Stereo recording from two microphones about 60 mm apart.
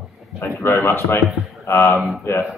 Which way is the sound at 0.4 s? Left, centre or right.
Left.